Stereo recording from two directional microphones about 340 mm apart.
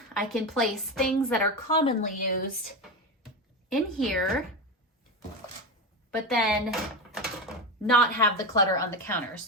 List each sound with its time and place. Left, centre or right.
0.2 s a woman's voice: centre
1.6 s a woman's voice: centre
3.7 s a woman's voice: centre
6.1 s a woman's voice: centre